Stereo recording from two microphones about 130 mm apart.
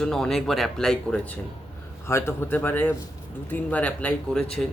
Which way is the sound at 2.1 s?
20° left (ahead or behind).